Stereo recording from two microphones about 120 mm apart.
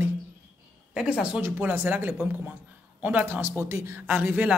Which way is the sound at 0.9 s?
5° right (ahead or behind).